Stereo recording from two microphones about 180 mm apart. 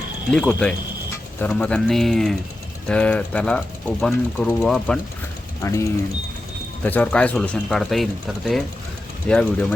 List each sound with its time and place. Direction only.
0.3 s speech: centre (ahead or behind)
9.2 s speech: 5° left (ahead or behind)